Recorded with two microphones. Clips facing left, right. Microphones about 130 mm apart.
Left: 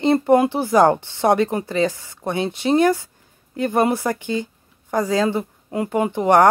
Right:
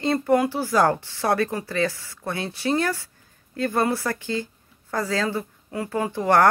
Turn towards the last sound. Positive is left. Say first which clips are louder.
# left 4 dB
turn(degrees=20)  # may be behind; listen again after turning